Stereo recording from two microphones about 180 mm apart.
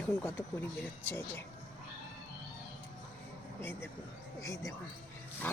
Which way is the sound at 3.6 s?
10° left (ahead or behind).